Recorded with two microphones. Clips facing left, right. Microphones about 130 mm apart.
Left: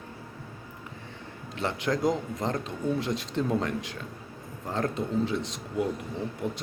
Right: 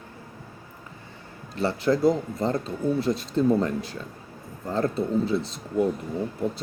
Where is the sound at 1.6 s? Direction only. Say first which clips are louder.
Right 5 dB; 35° right (ahead or behind).